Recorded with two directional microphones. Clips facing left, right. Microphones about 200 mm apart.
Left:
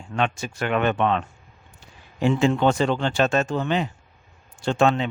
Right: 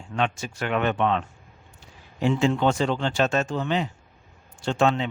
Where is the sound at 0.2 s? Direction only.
60° left (ahead or behind).